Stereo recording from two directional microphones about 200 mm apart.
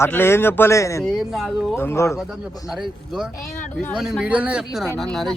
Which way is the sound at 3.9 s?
5° right (ahead or behind).